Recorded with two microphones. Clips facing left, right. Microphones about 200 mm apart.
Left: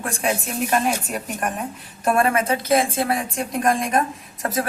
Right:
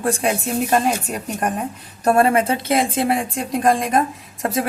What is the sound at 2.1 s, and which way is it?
A woman's voice, 30° right (ahead or behind).